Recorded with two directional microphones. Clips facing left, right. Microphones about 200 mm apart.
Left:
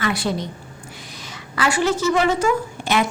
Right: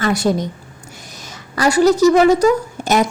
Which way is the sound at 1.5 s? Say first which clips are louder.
Right 8 dB; 40° right (ahead or behind).